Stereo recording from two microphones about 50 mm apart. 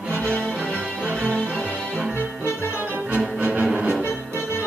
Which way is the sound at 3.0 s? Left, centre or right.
Right.